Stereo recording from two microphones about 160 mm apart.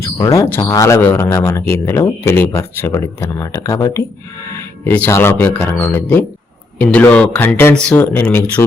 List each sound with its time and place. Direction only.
0.0 s speech: 20° left (ahead or behind)